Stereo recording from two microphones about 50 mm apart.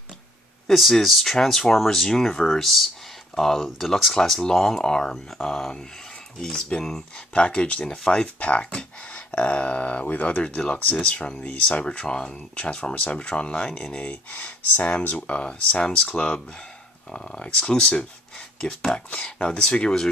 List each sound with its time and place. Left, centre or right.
0.7 s speech: centre
7.3 s speech: left
8.1 s speech: left